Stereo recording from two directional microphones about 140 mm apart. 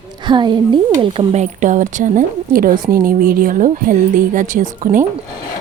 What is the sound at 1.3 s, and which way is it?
Speech, 60° right (ahead or behind).